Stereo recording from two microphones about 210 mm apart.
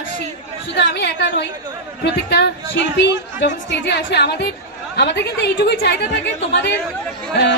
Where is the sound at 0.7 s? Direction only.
55° left (ahead or behind).